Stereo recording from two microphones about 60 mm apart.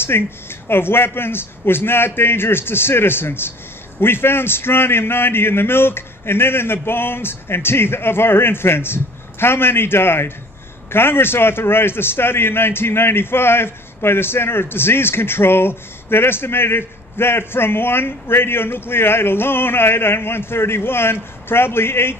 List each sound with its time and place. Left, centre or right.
0.0 s a man's voice: left